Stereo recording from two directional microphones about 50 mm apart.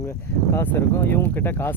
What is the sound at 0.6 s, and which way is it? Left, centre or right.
Speech, left.